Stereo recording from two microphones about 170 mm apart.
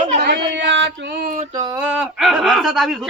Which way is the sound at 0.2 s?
75° right (ahead or behind).